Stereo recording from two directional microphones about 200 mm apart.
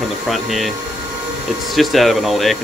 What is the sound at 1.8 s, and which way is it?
Speech, centre (ahead or behind).